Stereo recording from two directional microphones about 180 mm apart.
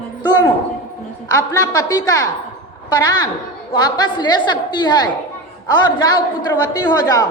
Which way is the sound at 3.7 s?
25° left (ahead or behind).